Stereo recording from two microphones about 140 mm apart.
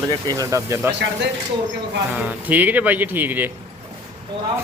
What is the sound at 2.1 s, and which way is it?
Speech, 10° right (ahead or behind).